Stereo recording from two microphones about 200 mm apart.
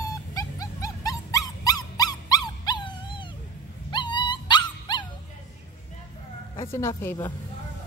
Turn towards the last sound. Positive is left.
turn(degrees=10)  # may be behind; listen again after turning